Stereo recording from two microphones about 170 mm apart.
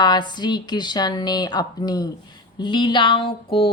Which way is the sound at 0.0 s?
25° left (ahead or behind).